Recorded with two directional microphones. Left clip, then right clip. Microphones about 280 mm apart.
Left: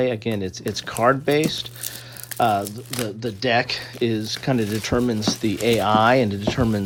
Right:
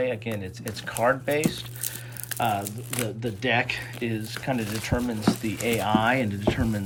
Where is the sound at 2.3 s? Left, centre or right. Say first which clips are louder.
Left 7 dB; centre.